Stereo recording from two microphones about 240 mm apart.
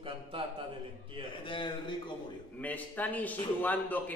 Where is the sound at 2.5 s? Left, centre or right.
Centre.